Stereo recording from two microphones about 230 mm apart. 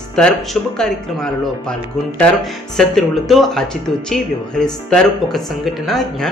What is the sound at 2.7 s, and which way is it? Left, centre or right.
Speech, centre.